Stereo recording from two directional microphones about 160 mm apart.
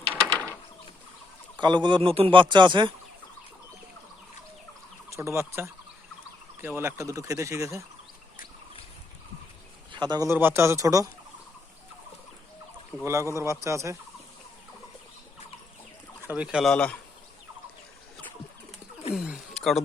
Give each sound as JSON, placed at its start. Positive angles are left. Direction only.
{"t": 0.1, "sound": "a sound", "side_deg": 10}
{"t": 1.5, "sound": "speech", "side_deg": -30}
{"t": 5.1, "sound": "a man's voice", "side_deg": -15}
{"t": 9.9, "sound": "speech", "side_deg": -30}
{"t": 10.2, "sound": "a man's voice", "side_deg": -15}
{"t": 13.4, "sound": "speech", "side_deg": -20}
{"t": 16.2, "sound": "a man's voice", "side_deg": -10}
{"t": 16.7, "sound": "speech", "side_deg": 5}
{"t": 19.1, "sound": "wild animals", "side_deg": -5}